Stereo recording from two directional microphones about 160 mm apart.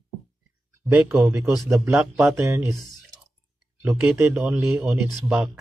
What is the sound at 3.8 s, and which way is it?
Speech, 15° right (ahead or behind).